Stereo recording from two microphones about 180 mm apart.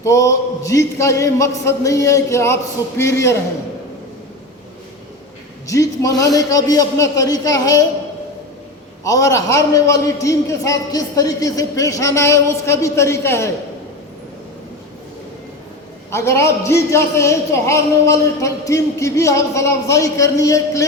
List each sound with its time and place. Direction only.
0.0 s a man's voice: 15° left (ahead or behind)
5.6 s a man's voice: 20° left (ahead or behind)
9.0 s a man's voice: 15° left (ahead or behind)
16.1 s a man's voice: 15° left (ahead or behind)